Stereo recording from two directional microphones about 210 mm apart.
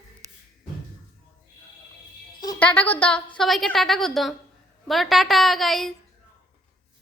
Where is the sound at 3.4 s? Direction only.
Centre (ahead or behind).